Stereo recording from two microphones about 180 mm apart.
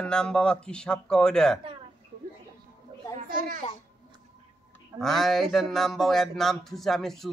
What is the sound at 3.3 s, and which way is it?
Babbling, 50° right (ahead or behind).